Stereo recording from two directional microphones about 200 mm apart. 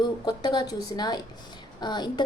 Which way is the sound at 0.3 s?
20° left (ahead or behind).